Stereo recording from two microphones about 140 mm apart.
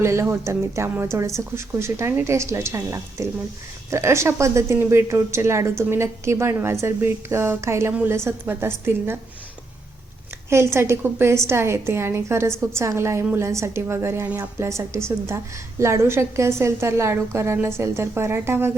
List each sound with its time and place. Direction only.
0.0 s speech: 20° right (ahead or behind)
10.5 s speech: 20° right (ahead or behind)